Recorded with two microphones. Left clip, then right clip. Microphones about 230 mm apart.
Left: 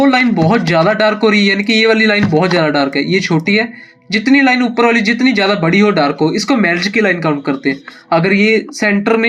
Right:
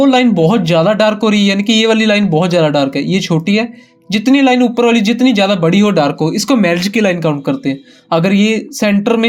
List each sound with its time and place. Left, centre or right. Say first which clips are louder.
0.0 s speech: right 1 dB; right